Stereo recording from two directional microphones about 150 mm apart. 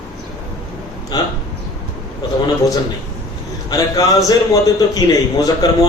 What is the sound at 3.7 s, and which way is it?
A man's voice, 25° left (ahead or behind).